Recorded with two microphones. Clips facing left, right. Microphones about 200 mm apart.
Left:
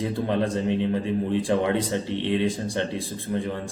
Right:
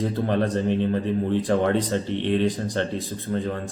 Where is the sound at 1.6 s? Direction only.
15° left (ahead or behind).